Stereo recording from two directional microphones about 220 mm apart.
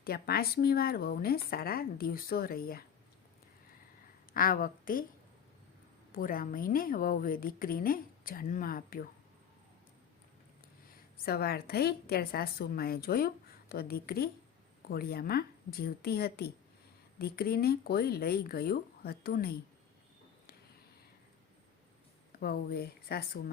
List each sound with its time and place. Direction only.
0.0 s speech: 45° left (ahead or behind)
4.4 s a woman's voice: 40° left (ahead or behind)
6.1 s a woman's voice: 40° left (ahead or behind)
10.8 s a woman's voice: 40° left (ahead or behind)
22.3 s a woman's voice: 45° left (ahead or behind)